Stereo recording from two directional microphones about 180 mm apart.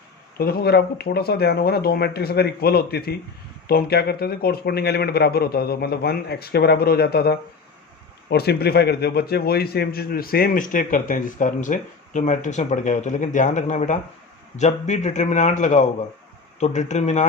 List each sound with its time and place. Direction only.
0.3 s a man's voice: 60° left (ahead or behind); by 17.2 s 40° left (ahead or behind)